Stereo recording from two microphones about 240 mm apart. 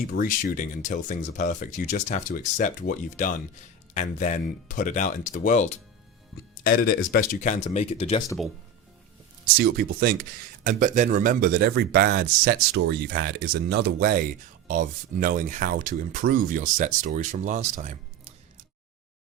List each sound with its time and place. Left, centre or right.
0.1 s speech: left
9.6 s speech: right